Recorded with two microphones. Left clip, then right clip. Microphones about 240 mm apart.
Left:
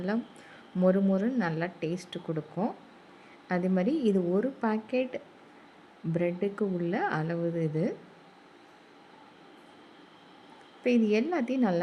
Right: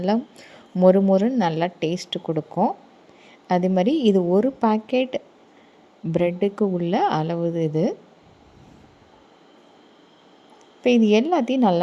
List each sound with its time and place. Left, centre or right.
0.8 s a woman's voice: right
10.8 s a woman's voice: right